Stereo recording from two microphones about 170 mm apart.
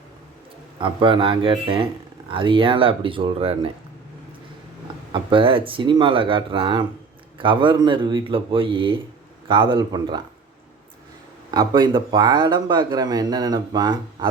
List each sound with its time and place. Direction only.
0.8 s speech: 30° right (ahead or behind)
5.1 s speech: 30° right (ahead or behind)
11.5 s speech: 25° right (ahead or behind)